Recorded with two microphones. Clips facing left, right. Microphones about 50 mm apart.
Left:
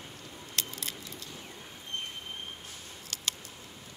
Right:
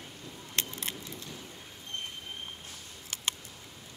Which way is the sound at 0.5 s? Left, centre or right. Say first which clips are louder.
Right 2 dB; right.